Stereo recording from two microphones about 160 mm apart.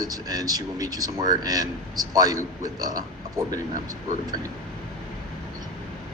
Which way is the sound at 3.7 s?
55° right (ahead or behind).